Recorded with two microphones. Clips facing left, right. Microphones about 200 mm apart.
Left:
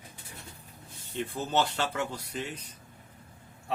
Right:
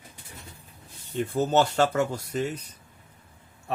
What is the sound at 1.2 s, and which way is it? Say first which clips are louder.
Speech: right 6 dB; 40° right (ahead or behind).